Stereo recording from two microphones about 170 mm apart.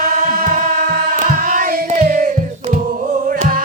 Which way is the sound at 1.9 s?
50° right (ahead or behind).